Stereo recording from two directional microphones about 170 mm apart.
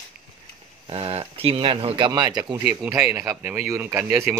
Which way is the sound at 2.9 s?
10° right (ahead or behind).